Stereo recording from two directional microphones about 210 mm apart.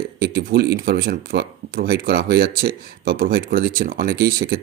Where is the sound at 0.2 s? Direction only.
50° right (ahead or behind).